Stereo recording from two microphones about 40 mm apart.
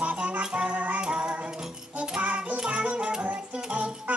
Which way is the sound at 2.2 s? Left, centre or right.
Right.